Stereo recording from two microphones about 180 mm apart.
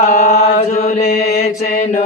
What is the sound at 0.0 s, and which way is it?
Chant, 40° left (ahead or behind).